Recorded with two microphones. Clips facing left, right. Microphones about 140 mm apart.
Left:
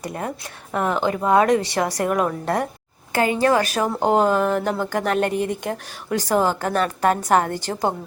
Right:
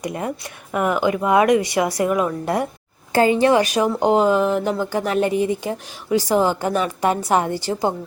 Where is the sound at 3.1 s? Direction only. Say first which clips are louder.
Right 3 dB; 30° right (ahead or behind).